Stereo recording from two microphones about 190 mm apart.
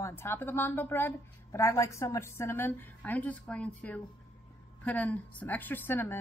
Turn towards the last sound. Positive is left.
turn(degrees=10)  # may be behind; listen again after turning